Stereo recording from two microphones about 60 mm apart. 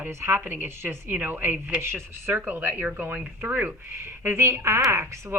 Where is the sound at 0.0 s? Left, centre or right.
Right.